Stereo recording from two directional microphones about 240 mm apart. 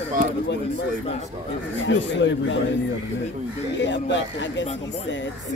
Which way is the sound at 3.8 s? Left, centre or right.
Left.